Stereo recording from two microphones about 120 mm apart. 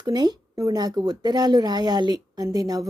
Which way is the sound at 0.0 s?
35° right (ahead or behind).